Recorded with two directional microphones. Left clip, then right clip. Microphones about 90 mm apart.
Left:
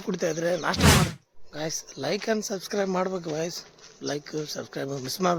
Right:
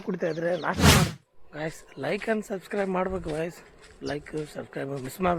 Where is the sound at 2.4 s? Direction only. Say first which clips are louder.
Left 1 dB; 45° left (ahead or behind).